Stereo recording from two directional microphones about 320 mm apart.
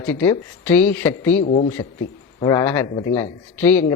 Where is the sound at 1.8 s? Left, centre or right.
Centre.